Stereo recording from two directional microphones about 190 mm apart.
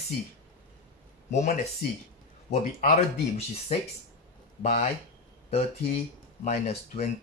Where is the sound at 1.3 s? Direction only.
35° left (ahead or behind).